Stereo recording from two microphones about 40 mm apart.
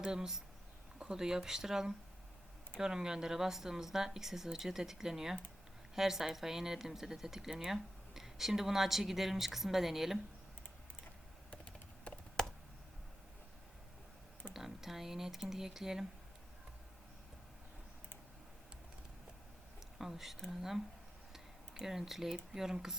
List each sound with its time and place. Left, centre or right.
0.0 s speech: centre
12.4 s a sound: centre
14.5 s speech: centre
20.0 s speech: centre
21.3 s tick-tock: centre
22.5 s speech: centre